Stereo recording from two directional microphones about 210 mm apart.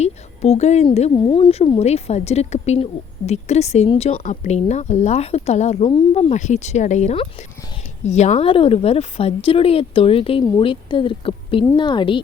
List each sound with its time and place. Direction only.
0.0 s a woman's voice: 30° left (ahead or behind)